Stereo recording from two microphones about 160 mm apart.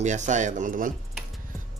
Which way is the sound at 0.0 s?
50° right (ahead or behind).